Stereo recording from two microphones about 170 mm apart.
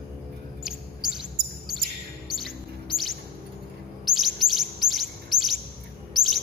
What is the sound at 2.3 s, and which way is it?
Chirp, centre (ahead or behind).